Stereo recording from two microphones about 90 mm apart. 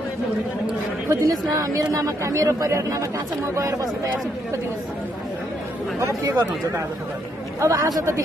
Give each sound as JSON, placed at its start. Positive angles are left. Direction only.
{"t": 1.0, "sound": "speech", "side_deg": -40}
{"t": 5.9, "sound": "speech", "side_deg": -35}
{"t": 7.6, "sound": "speech", "side_deg": -35}